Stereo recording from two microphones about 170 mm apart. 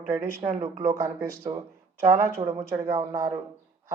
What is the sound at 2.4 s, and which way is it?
Speech, 35° right (ahead or behind).